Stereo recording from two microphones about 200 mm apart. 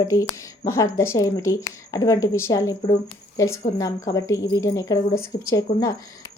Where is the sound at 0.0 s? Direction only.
15° left (ahead or behind).